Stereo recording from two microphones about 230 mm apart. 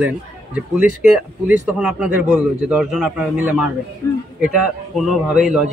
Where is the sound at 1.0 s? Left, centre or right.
Centre.